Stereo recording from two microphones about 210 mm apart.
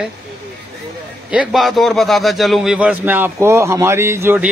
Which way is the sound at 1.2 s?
Centre (ahead or behind).